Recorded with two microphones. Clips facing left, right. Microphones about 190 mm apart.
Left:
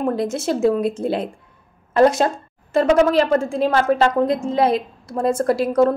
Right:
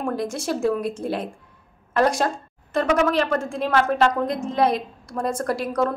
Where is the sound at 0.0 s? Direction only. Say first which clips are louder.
Left 5 dB; 25° left (ahead or behind).